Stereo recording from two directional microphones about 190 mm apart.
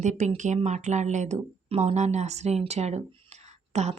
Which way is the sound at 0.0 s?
40° right (ahead or behind).